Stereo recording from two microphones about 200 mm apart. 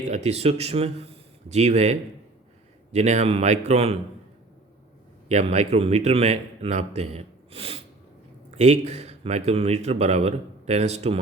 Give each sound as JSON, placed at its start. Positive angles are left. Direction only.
{"t": 0.1, "sound": "speech", "side_deg": -30}
{"t": 5.3, "sound": "a man's voice", "side_deg": -35}